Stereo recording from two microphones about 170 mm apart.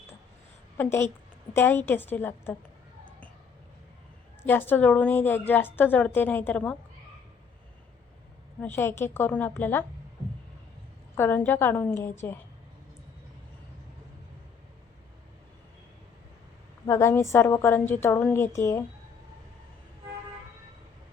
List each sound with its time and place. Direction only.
0.8 s a woman's voice: 15° left (ahead or behind)
4.4 s a woman's voice: 10° left (ahead or behind)
8.6 s a woman's voice: 15° left (ahead or behind)
11.1 s a woman's voice: 10° left (ahead or behind)
16.8 s a woman's voice: 15° left (ahead or behind)